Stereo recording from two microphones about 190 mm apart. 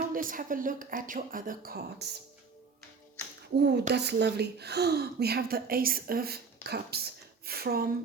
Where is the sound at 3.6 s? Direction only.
60° right (ahead or behind).